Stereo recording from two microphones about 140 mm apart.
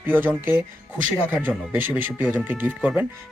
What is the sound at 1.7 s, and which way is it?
Speech, 15° right (ahead or behind).